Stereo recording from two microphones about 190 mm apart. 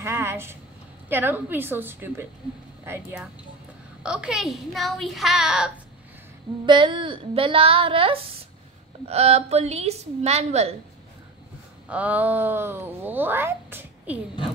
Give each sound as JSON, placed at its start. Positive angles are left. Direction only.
{"t": 0.0, "sound": "a sound", "side_deg": -15}
{"t": 1.0, "sound": "speech", "side_deg": -10}
{"t": 6.6, "sound": "a woman's voice", "side_deg": -25}
{"t": 11.9, "sound": "speech", "side_deg": -10}